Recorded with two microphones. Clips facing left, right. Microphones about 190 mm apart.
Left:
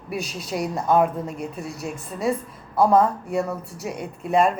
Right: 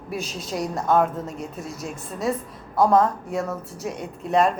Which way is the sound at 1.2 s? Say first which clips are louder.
Left 2 dB; 60° left (ahead or behind).